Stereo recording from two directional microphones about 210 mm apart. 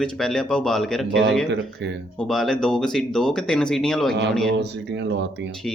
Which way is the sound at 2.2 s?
Centre (ahead or behind).